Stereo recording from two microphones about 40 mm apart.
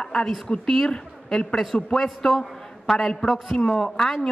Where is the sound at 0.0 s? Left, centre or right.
Left.